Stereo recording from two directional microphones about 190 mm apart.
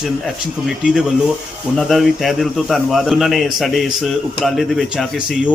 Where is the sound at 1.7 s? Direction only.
Centre (ahead or behind).